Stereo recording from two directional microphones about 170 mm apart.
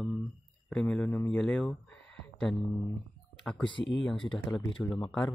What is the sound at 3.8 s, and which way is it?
Speech, 90° left.